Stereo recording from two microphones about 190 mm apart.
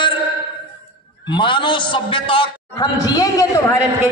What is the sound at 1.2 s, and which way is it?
A man's voice, 25° left (ahead or behind).